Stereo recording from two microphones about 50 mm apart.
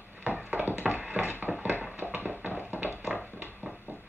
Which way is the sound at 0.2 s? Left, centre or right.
Right.